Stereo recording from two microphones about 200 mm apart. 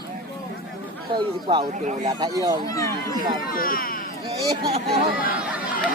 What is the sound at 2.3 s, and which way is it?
Speech, 15° right (ahead or behind).